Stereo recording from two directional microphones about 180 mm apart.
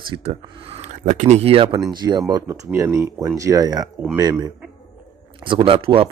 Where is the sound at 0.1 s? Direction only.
30° right (ahead or behind).